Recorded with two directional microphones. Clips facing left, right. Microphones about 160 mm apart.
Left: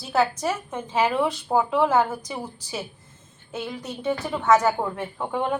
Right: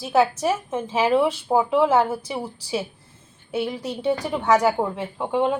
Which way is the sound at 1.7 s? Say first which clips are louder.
Right 3 dB; 20° right (ahead or behind).